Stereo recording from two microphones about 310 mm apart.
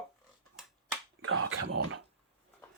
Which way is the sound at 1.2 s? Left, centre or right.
Right.